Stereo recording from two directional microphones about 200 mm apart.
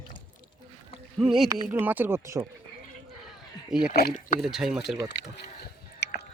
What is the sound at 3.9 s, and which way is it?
Speech, 45° left (ahead or behind).